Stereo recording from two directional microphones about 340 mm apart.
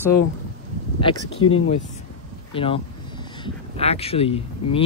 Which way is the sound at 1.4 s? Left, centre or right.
Left.